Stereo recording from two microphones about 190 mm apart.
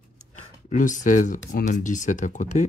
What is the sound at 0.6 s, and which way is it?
Speech, 40° left (ahead or behind).